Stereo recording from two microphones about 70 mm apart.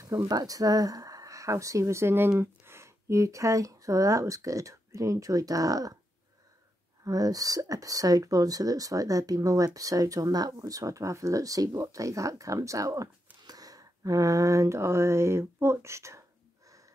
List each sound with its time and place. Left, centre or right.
0.0 s speech: right
7.1 s speech: right
13.5 s a sound: right